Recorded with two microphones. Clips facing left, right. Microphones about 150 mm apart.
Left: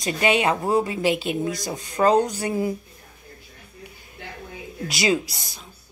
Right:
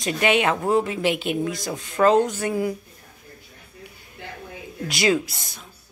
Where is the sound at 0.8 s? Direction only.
40° left (ahead or behind).